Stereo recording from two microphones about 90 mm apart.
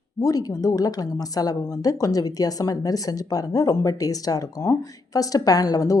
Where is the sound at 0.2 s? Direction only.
40° left (ahead or behind).